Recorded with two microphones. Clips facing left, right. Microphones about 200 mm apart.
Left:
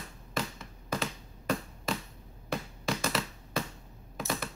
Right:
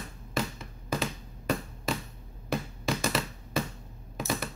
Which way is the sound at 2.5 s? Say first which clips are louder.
Right 3 dB; 5° right (ahead or behind).